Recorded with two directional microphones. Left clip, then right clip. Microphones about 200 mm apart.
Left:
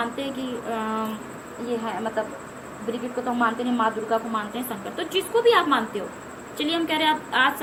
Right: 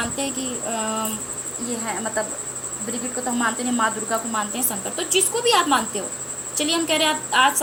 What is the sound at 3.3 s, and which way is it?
Speech, 35° right (ahead or behind).